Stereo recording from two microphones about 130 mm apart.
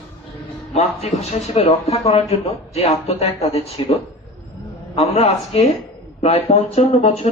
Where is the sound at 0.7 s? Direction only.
50° left (ahead or behind).